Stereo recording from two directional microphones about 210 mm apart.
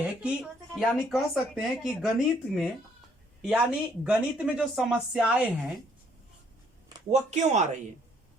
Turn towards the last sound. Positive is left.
turn(degrees=-35)  # may be behind; listen again after turning